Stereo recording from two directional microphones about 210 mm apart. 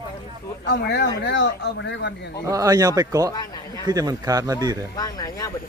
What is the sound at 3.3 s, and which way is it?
Speech, 20° left (ahead or behind).